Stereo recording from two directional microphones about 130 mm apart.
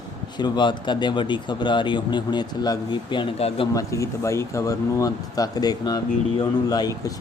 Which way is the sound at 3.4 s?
50° left (ahead or behind).